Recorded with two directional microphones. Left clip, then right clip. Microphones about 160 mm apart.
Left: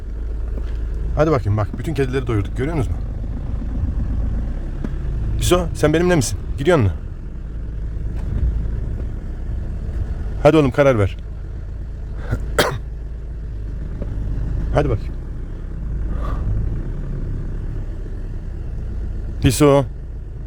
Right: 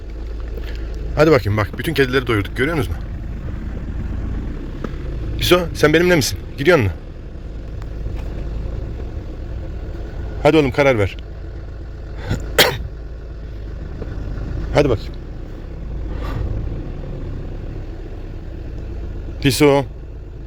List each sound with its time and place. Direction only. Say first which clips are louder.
1.1 s speech: right 4 dB; 5° left (ahead or behind)
5.4 s vehicle: right 3 dB; 20° left (ahead or behind)
5.7 s speech: right 3 dB; 15° left (ahead or behind)
10.4 s a man's voice: even; 35° left (ahead or behind)
12.3 s cough: right 4 dB; 25° left (ahead or behind)
19.4 s a man's voice: even; 30° left (ahead or behind)